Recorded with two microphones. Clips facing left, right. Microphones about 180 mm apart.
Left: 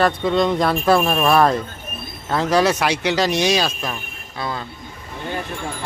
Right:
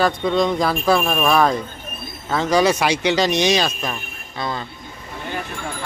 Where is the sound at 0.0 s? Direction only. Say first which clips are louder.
Left 1 dB; centre (ahead or behind).